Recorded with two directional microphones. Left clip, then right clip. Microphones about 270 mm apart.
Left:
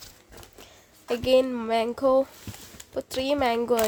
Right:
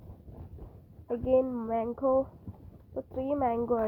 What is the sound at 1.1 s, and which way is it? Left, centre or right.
A woman's voice, centre.